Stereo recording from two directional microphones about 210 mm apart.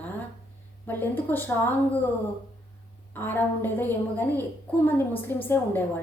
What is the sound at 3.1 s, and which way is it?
A woman's voice, 10° left (ahead or behind).